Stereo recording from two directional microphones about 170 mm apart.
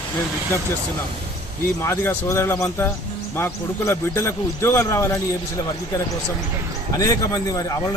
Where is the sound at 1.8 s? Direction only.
15° left (ahead or behind).